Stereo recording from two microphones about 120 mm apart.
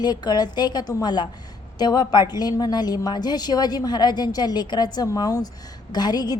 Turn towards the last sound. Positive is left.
turn(degrees=35)  # may be behind; listen again after turning